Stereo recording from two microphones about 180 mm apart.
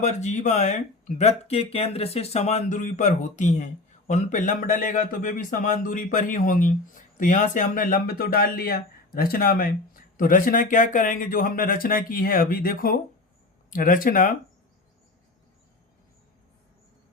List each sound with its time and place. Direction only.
0.0 s speech: 40° left (ahead or behind)